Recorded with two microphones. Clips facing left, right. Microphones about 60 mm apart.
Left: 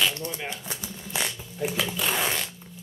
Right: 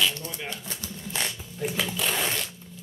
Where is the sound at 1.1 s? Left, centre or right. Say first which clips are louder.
Left 2 dB; centre.